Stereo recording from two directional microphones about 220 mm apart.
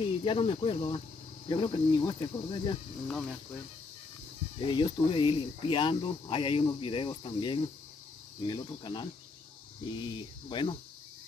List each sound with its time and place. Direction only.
0.0 s speech: 25° left (ahead or behind)
4.6 s speech: 20° left (ahead or behind)